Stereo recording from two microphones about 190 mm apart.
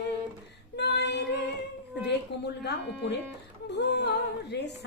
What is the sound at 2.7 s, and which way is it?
Music, 60° left (ahead or behind).